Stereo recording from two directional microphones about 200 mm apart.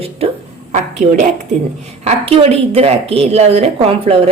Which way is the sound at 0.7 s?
35° right (ahead or behind).